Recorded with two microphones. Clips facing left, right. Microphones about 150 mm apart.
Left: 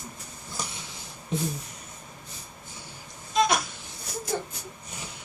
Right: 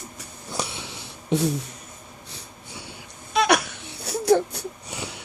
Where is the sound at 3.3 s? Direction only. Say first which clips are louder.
Right 3 dB; 70° right (ahead or behind).